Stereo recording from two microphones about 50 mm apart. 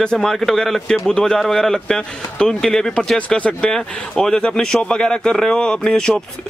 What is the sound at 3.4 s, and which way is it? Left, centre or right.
Speech, left.